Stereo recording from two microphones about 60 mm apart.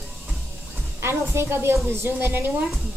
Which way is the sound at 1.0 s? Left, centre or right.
Right.